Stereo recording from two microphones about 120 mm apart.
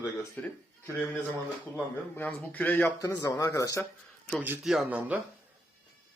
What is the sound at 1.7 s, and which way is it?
Speech, 15° left (ahead or behind).